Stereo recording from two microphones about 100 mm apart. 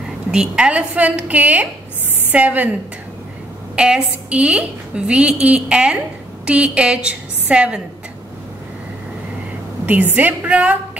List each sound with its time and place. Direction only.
0.3 s a woman's voice: 10° right (ahead or behind)
3.7 s a woman's voice: 10° right (ahead or behind)
9.8 s a woman's voice: 15° right (ahead or behind)